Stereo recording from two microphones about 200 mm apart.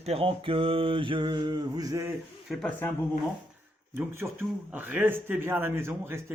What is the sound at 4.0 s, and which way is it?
Speech, 10° right (ahead or behind).